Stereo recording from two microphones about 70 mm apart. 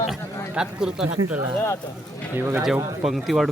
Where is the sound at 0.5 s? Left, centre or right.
Centre.